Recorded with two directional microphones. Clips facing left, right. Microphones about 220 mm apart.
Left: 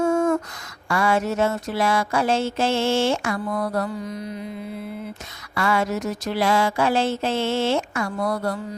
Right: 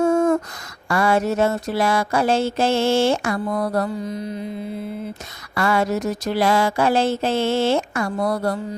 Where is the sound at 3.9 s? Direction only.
25° right (ahead or behind).